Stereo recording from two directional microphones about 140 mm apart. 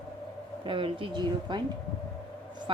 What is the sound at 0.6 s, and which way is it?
Speech, 35° right (ahead or behind).